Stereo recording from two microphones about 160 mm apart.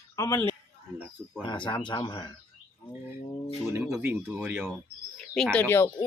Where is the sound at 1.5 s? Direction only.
30° left (ahead or behind).